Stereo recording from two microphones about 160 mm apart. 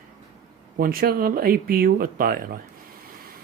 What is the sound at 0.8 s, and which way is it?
Speech, 65° right (ahead or behind).